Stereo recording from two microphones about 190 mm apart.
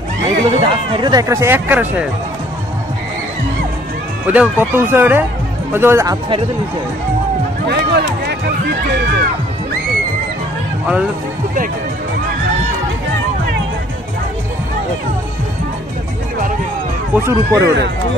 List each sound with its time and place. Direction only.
0.2 s speech: 20° right (ahead or behind)
4.3 s speech: 10° right (ahead or behind)
7.6 s run: 60° right (ahead or behind)
17.1 s speech: 15° right (ahead or behind)